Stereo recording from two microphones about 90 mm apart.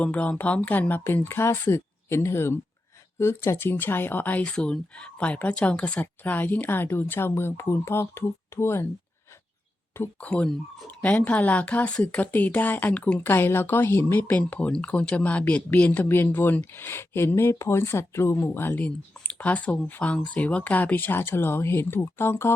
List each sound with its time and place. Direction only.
0.0 s a woman's voice: 15° left (ahead or behind)
10.2 s a woman's voice: 10° left (ahead or behind)